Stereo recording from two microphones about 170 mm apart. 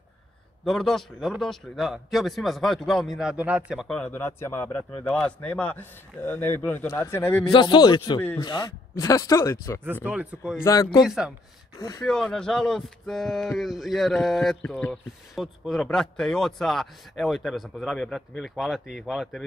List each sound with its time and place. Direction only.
0.7 s speech: centre (ahead or behind)
7.5 s speech: 25° left (ahead or behind)
10.0 s speech: 5° right (ahead or behind)
10.6 s speech: 20° left (ahead or behind)
11.1 s speech: 5° right (ahead or behind)